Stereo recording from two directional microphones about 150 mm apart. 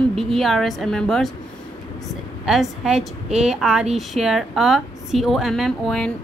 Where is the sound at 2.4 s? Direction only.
5° right (ahead or behind).